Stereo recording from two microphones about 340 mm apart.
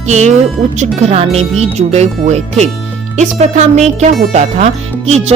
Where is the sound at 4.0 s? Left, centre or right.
Centre.